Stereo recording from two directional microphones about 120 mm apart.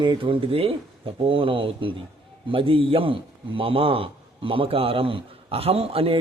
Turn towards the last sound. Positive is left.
turn(degrees=-55)  # may be behind; listen again after turning